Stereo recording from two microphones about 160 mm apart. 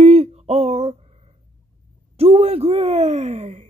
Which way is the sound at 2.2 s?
40° right (ahead or behind).